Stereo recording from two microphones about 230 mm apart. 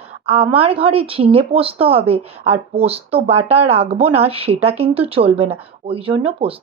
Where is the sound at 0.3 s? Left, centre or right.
Right.